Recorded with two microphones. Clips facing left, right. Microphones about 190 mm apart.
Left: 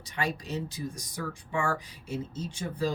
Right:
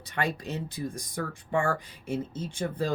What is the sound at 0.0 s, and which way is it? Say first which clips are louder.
Speech: right 2 dB; 55° right (ahead or behind).